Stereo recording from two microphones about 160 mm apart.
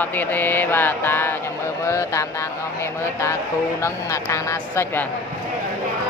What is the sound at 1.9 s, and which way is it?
Speech, 20° left (ahead or behind).